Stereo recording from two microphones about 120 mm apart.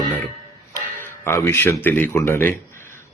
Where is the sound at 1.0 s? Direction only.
20° left (ahead or behind).